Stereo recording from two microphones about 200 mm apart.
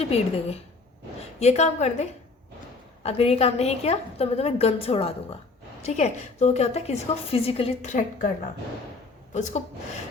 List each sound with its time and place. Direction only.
0.1 s a woman's voice: 30° left (ahead or behind)
1.4 s a woman's voice: 35° left (ahead or behind)
9.3 s a woman's voice: 35° left (ahead or behind)